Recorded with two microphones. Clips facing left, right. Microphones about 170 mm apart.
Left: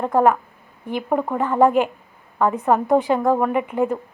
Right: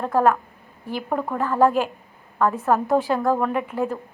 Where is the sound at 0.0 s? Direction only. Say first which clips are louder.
Left 2 dB; 15° left (ahead or behind).